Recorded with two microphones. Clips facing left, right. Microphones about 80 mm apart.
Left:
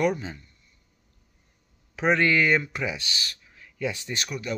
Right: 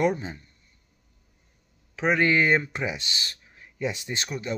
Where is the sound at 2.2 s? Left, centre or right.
Right.